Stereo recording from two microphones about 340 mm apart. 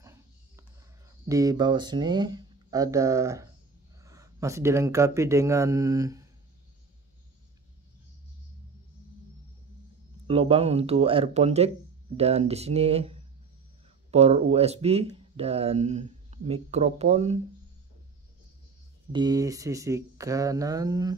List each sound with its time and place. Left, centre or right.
1.2 s speech: centre
10.2 s speech: centre
19.1 s speech: centre